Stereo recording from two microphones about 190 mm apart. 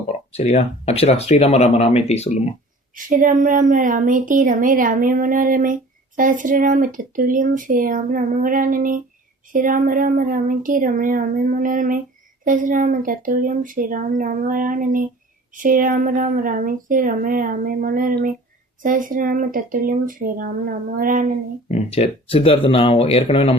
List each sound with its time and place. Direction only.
0.3 s speech: 35° left (ahead or behind)
2.9 s speech: 45° right (ahead or behind)
21.7 s speech: 35° left (ahead or behind)